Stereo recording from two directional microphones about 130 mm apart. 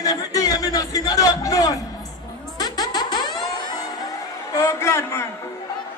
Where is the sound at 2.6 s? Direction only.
30° left (ahead or behind).